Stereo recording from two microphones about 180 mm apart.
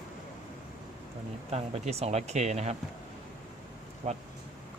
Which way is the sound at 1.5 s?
35° right (ahead or behind).